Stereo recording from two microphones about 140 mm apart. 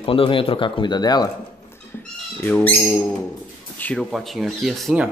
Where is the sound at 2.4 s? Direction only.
10° left (ahead or behind).